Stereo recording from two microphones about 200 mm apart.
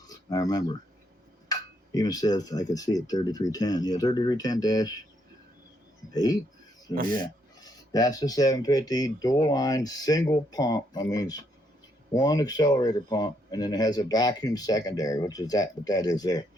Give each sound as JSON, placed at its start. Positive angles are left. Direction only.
{"t": 0.1, "sound": "speech", "side_deg": 20}
{"t": 7.1, "sound": "speech", "side_deg": 20}